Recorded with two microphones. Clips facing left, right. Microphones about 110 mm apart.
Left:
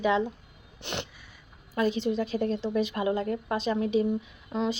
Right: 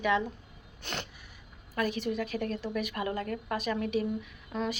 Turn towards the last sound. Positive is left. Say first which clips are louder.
# left 4 dB
turn(degrees=20)  # may be behind; listen again after turning